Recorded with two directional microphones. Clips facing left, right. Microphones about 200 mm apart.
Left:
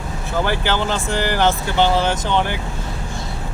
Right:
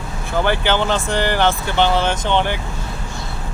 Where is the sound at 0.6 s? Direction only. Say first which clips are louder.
Right 2 dB; 20° right (ahead or behind).